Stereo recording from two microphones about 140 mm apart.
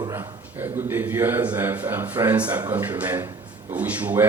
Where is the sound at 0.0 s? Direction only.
20° right (ahead or behind).